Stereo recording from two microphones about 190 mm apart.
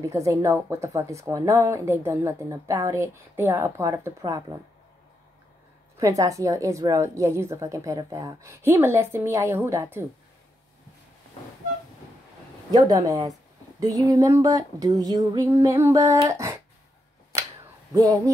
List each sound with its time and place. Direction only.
0.1 s speech: 15° right (ahead or behind)
5.9 s speech: 15° right (ahead or behind)
12.7 s speech: 20° right (ahead or behind)
17.9 s speech: 15° right (ahead or behind)